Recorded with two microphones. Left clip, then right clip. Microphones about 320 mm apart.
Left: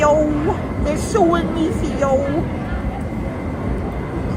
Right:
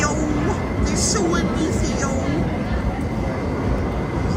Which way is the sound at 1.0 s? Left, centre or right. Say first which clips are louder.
Left 6 dB; centre.